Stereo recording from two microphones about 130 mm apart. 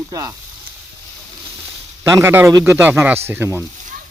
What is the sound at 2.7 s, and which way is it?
Speech, 15° right (ahead or behind).